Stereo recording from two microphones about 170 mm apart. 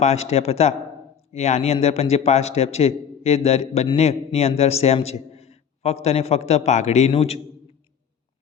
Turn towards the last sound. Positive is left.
turn(degrees=35)  # may be behind; listen again after turning